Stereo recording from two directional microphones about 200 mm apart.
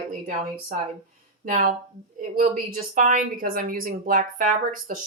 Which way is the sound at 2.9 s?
40° right (ahead or behind).